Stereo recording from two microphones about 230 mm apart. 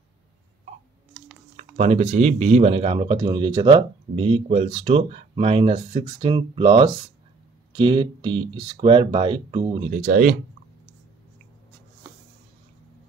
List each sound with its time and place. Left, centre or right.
1.6 s speech: right